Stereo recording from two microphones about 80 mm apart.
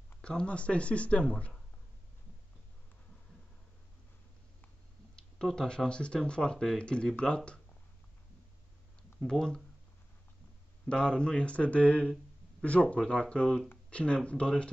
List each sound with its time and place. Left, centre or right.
0.2 s speech: centre
5.4 s speech: centre
9.2 s speech: centre
10.9 s speech: centre